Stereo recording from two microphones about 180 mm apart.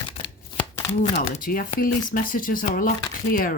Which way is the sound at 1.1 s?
55° left (ahead or behind).